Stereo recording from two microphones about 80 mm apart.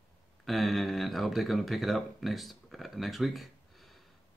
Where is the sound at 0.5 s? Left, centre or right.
Centre.